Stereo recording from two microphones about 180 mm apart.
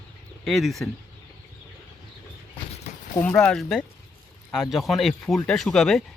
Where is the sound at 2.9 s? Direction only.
40° left (ahead or behind).